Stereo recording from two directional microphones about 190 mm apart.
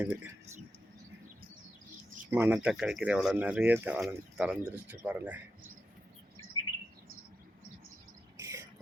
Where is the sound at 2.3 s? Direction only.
10° right (ahead or behind).